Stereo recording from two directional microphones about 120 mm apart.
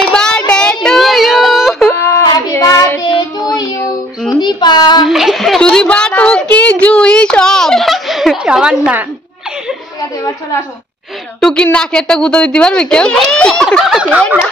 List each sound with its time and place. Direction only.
0.1 s child singing: 5° left (ahead or behind)
1.9 s child singing: 20° left (ahead or behind)
5.0 s a sound: 5° right (ahead or behind)
11.4 s a woman's voice: 10° left (ahead or behind)